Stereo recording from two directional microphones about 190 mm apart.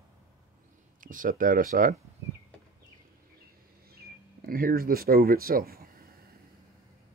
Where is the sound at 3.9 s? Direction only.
50° right (ahead or behind).